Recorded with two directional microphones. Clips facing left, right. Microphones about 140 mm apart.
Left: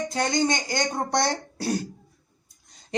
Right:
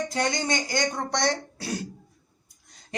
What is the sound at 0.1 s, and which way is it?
Speech, 25° left (ahead or behind).